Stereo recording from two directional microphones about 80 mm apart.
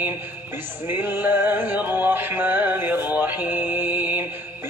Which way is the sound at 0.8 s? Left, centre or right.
Right.